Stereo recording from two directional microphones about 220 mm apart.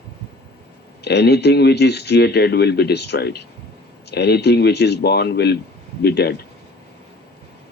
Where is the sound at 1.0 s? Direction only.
50° left (ahead or behind).